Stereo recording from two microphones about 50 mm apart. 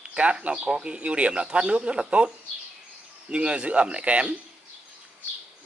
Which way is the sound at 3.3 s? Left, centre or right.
Right.